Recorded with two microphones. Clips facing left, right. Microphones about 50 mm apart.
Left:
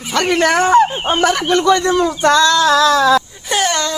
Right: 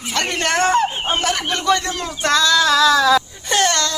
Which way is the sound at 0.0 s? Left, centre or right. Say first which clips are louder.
Left 7 dB; centre.